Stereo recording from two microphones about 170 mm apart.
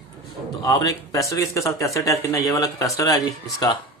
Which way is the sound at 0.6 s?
20° left (ahead or behind).